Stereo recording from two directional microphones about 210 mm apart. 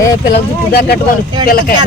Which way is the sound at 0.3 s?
45° left (ahead or behind).